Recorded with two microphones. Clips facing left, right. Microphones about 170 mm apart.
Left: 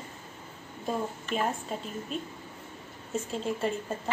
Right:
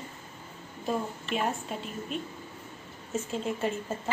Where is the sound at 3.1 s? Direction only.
Centre (ahead or behind).